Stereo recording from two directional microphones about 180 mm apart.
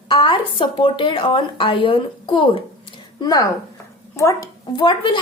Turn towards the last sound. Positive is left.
turn(degrees=25)  # may be behind; listen again after turning